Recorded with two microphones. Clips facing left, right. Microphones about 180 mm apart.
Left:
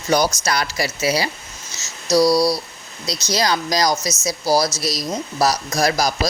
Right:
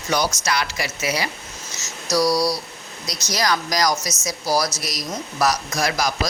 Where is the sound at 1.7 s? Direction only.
25° left (ahead or behind).